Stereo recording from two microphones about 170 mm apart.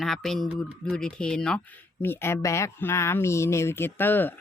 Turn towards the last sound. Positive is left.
turn(degrees=10)  # may be behind; listen again after turning